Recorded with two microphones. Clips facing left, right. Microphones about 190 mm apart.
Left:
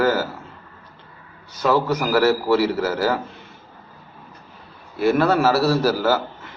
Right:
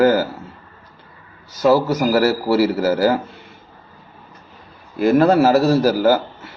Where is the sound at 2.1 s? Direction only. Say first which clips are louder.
Even; 10° right (ahead or behind).